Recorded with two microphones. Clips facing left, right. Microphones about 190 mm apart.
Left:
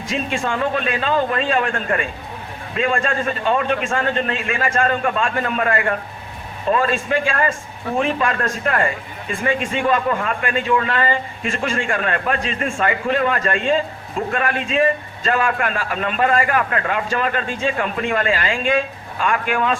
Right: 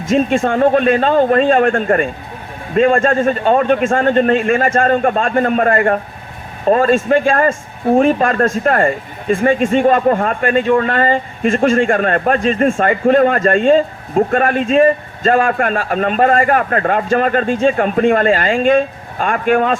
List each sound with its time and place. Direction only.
0.0 s a man's voice: 50° right (ahead or behind)